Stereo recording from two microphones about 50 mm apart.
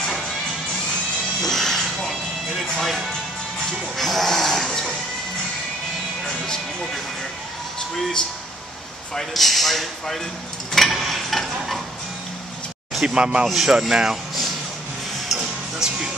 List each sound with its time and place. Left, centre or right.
1.4 s music: centre
3.9 s speech: centre
6.2 s speech: centre
9.1 s speech: centre
13.0 s speech: centre
13.5 s speech: centre
15.2 s music: centre